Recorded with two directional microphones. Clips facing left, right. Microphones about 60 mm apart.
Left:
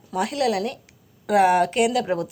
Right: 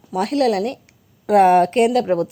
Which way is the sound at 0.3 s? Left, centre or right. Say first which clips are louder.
Right 7 dB; right.